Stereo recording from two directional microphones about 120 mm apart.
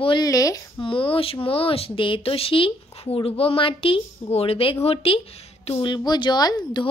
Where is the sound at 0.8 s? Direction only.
45° left (ahead or behind).